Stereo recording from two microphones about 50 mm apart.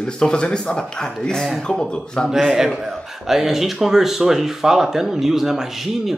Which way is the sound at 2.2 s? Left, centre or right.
Centre.